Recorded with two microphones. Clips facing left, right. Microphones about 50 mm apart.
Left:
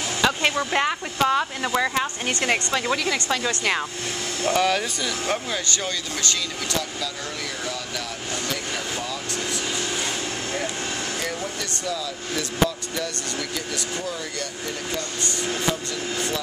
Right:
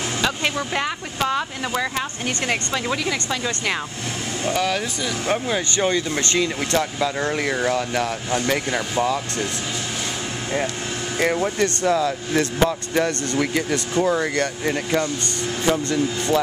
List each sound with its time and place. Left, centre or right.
0.2 s speech: centre
5.2 s speech: centre
5.7 s speech: right
11.1 s speech: right